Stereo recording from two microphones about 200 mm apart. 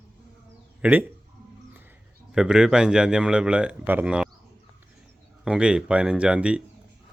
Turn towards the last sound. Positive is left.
turn(degrees=-5)  # may be behind; listen again after turning